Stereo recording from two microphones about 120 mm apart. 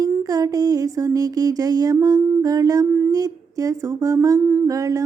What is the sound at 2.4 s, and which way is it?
Speech, 30° right (ahead or behind).